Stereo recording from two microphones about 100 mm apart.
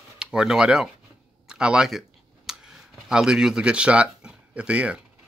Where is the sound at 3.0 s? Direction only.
5° right (ahead or behind).